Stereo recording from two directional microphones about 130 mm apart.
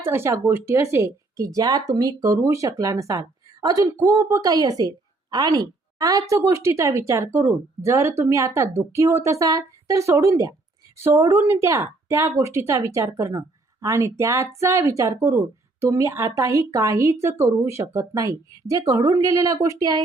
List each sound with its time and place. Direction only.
0.0 s speech: 20° right (ahead or behind)